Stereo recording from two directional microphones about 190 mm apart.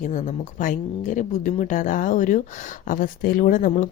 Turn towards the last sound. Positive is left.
turn(degrees=40)  # may be behind; listen again after turning